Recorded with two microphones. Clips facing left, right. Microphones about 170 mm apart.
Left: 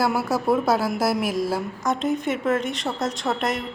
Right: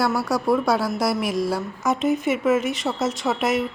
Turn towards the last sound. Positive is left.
turn(degrees=-5)  # may be behind; listen again after turning